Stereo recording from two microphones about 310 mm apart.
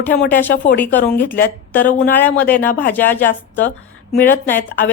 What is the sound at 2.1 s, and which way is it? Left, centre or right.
A woman's voice, centre.